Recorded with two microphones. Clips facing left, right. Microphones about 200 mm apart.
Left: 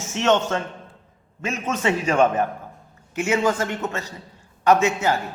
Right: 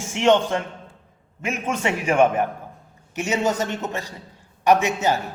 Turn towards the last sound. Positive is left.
turn(degrees=-15)  # may be behind; listen again after turning